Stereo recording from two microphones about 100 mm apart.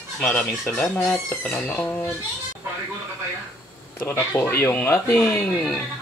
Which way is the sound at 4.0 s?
20° left (ahead or behind).